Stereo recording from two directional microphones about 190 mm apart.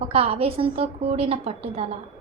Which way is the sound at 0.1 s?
30° right (ahead or behind).